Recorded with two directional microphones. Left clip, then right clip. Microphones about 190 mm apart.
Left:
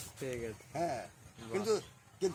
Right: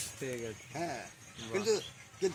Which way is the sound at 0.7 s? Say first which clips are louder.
Left 3 dB; 5° left (ahead or behind).